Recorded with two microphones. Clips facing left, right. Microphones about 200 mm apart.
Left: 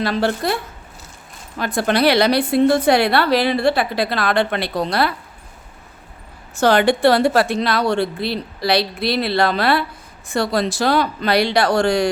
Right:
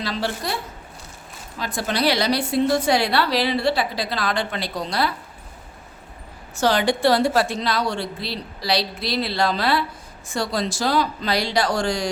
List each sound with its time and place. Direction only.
0.0 s a woman's voice: 55° left (ahead or behind)
1.5 s a woman's voice: 60° left (ahead or behind)
6.6 s a woman's voice: 60° left (ahead or behind)